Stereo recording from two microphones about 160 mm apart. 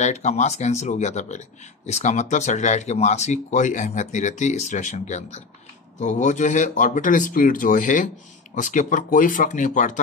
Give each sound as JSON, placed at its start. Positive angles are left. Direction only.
{"t": 0.0, "sound": "speech", "side_deg": 45}